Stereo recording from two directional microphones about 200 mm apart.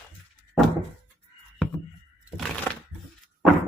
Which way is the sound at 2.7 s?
10° left (ahead or behind).